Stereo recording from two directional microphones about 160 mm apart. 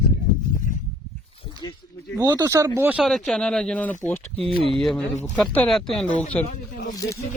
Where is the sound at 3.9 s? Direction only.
50° left (ahead or behind).